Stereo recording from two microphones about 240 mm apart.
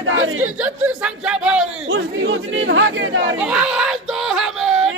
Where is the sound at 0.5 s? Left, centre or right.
Centre.